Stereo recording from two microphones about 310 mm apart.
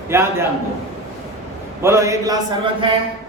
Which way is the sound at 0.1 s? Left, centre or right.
Centre.